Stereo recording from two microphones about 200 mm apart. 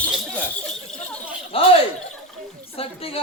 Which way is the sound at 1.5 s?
30° left (ahead or behind).